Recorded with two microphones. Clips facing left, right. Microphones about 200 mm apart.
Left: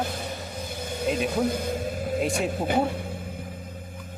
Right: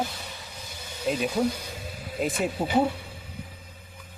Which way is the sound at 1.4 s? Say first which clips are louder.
Left 3 dB; 50° left (ahead or behind).